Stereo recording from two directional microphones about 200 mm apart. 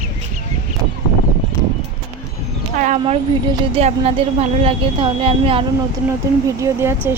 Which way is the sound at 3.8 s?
30° right (ahead or behind).